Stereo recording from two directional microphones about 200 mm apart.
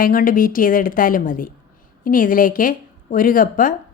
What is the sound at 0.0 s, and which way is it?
A woman's voice, 45° left (ahead or behind).